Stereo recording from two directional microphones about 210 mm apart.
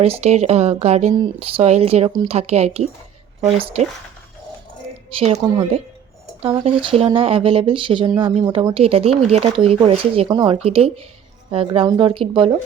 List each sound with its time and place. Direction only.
0.0 s speech: 30° right (ahead or behind)
5.1 s speech: 30° right (ahead or behind)